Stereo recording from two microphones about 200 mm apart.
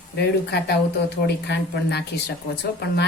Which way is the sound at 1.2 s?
55° left (ahead or behind).